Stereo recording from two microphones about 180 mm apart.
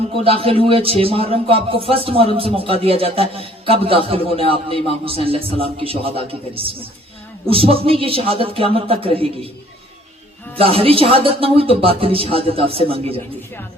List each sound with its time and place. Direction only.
0.3 s speech: 30° right (ahead or behind)
10.6 s speech: 30° right (ahead or behind)